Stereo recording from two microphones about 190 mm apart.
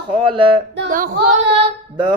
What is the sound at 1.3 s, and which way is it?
Speech, 30° right (ahead or behind).